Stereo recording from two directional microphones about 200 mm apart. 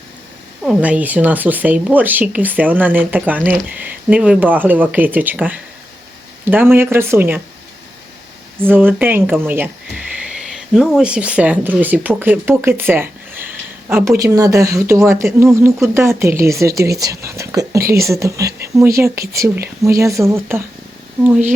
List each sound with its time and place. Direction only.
0.6 s speech: 5° right (ahead or behind)
8.6 s speech: 10° right (ahead or behind)